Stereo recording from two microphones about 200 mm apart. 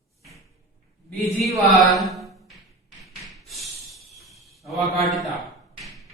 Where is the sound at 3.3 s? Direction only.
Centre (ahead or behind).